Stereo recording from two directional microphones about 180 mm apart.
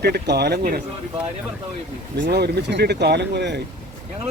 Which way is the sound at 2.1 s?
75° right (ahead or behind).